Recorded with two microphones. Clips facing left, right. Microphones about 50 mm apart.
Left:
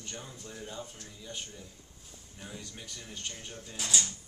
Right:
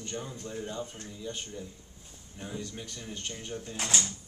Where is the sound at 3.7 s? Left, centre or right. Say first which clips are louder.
Right 1 dB; right.